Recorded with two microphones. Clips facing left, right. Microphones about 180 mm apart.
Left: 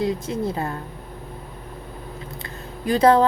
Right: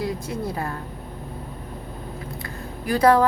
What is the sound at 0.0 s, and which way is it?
Speech, 20° left (ahead or behind).